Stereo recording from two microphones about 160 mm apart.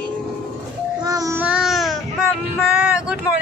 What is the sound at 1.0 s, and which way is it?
Child singing, 20° right (ahead or behind).